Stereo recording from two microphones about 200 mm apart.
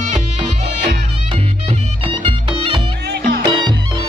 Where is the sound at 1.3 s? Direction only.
25° right (ahead or behind).